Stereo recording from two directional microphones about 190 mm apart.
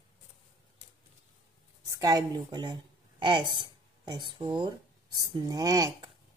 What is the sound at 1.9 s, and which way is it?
Speech, 20° right (ahead or behind).